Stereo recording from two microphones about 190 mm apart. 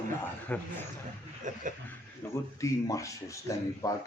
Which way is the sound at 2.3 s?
15° left (ahead or behind).